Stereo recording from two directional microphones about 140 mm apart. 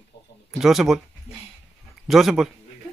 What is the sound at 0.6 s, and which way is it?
Speech, centre (ahead or behind).